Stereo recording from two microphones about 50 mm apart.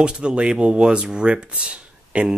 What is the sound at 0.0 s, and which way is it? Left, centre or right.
Speech, centre.